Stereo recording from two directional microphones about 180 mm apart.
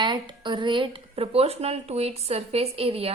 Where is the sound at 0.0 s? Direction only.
25° right (ahead or behind).